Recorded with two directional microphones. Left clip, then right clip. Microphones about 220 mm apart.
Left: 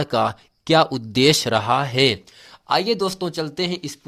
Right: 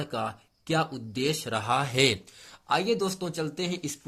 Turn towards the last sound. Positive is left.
turn(degrees=20)  # may be behind; listen again after turning